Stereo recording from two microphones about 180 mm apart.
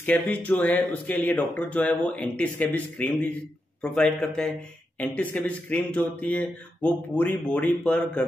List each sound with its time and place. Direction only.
0.0 s a man's voice: 10° left (ahead or behind)